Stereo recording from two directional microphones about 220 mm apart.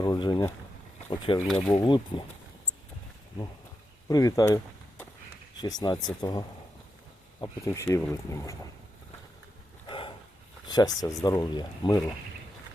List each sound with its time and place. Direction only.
0.0 s speech: 20° left (ahead or behind)
1.5 s speech: 5° left (ahead or behind)
1.7 s speech: 20° left (ahead or behind)
4.1 s speech: 15° left (ahead or behind)
7.4 s speech: 15° left (ahead or behind)
9.8 s a sound: 25° left (ahead or behind)
10.7 s speech: 20° left (ahead or behind)